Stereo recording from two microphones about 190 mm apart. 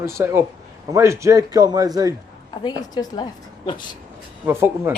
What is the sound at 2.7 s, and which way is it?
A woman's voice, 25° left (ahead or behind).